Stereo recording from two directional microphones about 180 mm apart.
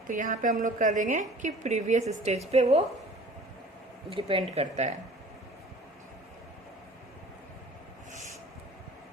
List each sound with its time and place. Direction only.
0.1 s a woman's voice: 45° right (ahead or behind)
4.1 s speech: 30° right (ahead or behind)
4.5 s speech: 40° right (ahead or behind)